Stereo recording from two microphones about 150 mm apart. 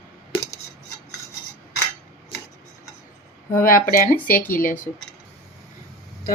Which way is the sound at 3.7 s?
75° left (ahead or behind).